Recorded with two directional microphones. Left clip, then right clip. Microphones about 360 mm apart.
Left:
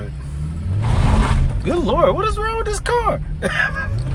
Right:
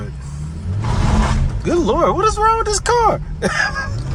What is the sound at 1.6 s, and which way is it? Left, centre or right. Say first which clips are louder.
Speech: right 1 dB; centre.